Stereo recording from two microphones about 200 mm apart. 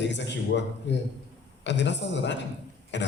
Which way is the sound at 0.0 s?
60° left (ahead or behind).